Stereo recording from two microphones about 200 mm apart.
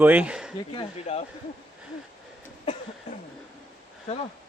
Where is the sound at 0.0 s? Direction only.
10° right (ahead or behind).